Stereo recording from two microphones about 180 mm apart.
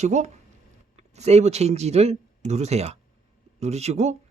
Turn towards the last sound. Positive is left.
turn(degrees=-40)  # may be behind; listen again after turning